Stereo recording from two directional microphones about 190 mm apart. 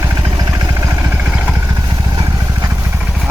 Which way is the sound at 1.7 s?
20° right (ahead or behind).